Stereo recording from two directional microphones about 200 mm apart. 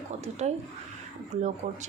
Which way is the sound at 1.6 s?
35° right (ahead or behind).